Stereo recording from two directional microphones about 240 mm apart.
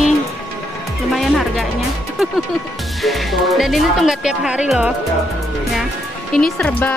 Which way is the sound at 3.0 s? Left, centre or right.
Centre.